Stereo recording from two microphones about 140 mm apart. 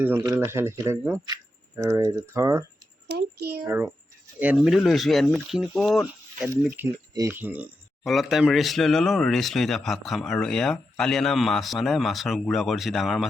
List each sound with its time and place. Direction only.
0.3 s speech: 20° right (ahead or behind); by 6.0 s centre (ahead or behind)
6.6 s speech: 10° right (ahead or behind)
7.1 s speech: 25° right (ahead or behind)
7.3 s speech: 10° right (ahead or behind)
8.0 s speech: centre (ahead or behind)